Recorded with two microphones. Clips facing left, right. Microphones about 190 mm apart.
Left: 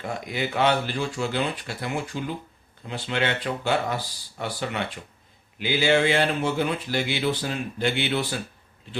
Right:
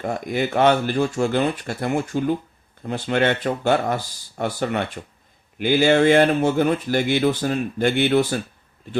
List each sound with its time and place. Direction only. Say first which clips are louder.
0.0 s speech: right 6 dB; 50° right (ahead or behind)